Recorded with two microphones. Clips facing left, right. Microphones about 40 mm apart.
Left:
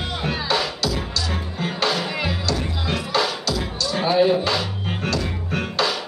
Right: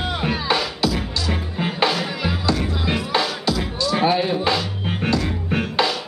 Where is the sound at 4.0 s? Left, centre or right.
Centre.